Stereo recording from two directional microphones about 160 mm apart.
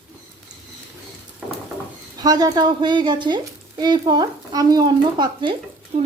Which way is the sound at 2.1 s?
25° right (ahead or behind).